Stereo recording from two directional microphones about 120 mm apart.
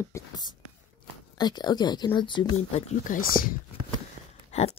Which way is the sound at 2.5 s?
65° left (ahead or behind).